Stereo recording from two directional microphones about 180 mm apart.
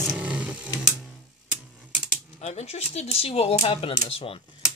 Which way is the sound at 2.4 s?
35° left (ahead or behind).